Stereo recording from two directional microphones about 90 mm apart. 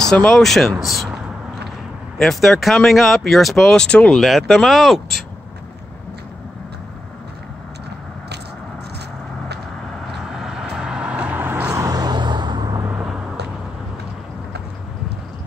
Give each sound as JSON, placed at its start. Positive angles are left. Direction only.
{"t": 0.1, "sound": "speech", "side_deg": 10}
{"t": 2.1, "sound": "speech", "side_deg": 5}
{"t": 10.2, "sound": "vehicle", "side_deg": -5}
{"t": 11.7, "sound": "vehicle", "side_deg": -40}